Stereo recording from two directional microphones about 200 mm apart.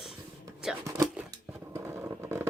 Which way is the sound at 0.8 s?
15° right (ahead or behind).